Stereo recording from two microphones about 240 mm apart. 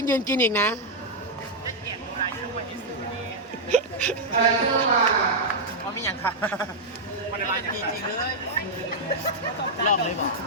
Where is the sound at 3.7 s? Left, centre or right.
Centre.